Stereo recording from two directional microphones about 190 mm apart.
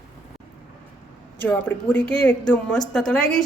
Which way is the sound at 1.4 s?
10° left (ahead or behind).